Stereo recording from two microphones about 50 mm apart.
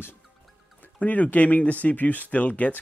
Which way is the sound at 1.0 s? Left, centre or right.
Left.